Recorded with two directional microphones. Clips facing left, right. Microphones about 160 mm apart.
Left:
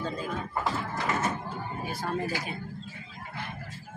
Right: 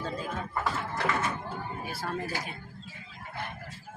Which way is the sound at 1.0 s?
65° right (ahead or behind).